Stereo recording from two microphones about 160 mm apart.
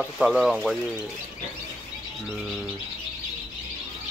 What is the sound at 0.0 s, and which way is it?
Speech, centre (ahead or behind).